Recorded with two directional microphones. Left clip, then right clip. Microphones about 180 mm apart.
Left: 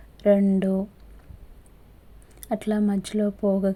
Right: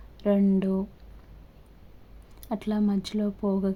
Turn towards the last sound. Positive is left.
turn(degrees=20)  # may be behind; listen again after turning